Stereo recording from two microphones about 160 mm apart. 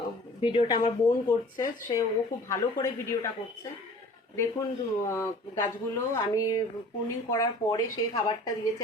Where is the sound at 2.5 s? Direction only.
20° left (ahead or behind).